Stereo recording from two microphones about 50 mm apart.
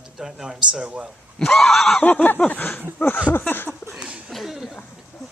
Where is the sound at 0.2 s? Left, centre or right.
Centre.